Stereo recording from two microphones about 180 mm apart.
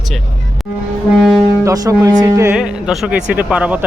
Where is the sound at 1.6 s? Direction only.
20° right (ahead or behind).